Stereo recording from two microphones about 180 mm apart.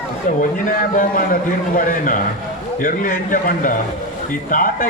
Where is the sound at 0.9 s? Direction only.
50° left (ahead or behind).